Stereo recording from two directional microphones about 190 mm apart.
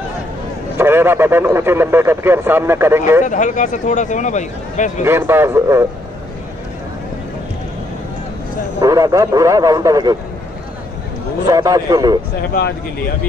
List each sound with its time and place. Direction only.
0.7 s speech: 10° right (ahead or behind)
3.3 s a man's voice: 40° left (ahead or behind)
5.0 s speech: 10° right (ahead or behind)
8.8 s a man's voice: 20° right (ahead or behind)
11.4 s a man's voice: 20° right (ahead or behind)